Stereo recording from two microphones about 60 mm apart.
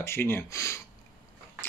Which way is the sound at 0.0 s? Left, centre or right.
Left.